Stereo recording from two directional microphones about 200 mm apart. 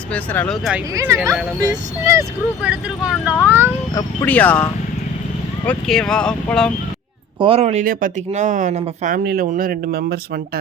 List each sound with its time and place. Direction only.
0.1 s speech: 5° left (ahead or behind)
0.9 s speech: 15° right (ahead or behind)
3.9 s speech: 10° left (ahead or behind)
5.6 s speech: 5° left (ahead or behind)
7.3 s speech: 25° right (ahead or behind); by 10.6 s 50° right (ahead or behind)